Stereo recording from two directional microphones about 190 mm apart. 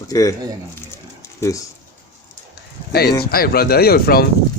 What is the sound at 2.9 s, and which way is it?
Speech, 55° left (ahead or behind).